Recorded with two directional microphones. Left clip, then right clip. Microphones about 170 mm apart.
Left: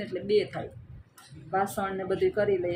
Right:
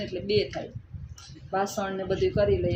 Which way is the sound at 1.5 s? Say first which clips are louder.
Even; 15° right (ahead or behind).